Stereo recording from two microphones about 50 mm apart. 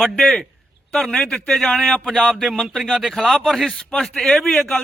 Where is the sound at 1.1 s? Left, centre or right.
Centre.